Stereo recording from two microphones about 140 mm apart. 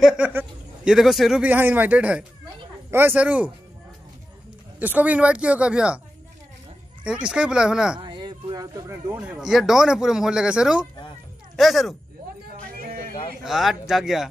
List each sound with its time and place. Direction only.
0.8 s a man's voice: centre (ahead or behind)
4.7 s a man's voice: 10° right (ahead or behind)
7.1 s a man's voice: 5° right (ahead or behind)
8.0 s a sound: 35° right (ahead or behind)
9.2 s speech: 5° right (ahead or behind)
12.8 s a sound: 90° right
13.4 s speech: centre (ahead or behind)